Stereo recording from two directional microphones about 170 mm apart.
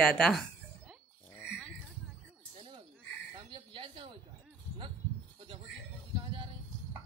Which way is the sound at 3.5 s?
30° right (ahead or behind).